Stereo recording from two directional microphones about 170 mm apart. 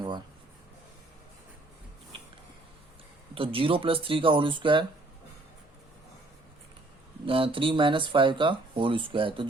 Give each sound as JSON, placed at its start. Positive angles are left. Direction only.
{"t": 3.3, "sound": "speech", "side_deg": -30}
{"t": 7.3, "sound": "speech", "side_deg": -30}